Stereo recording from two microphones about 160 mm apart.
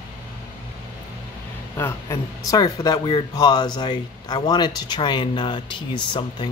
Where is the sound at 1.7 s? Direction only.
20° left (ahead or behind).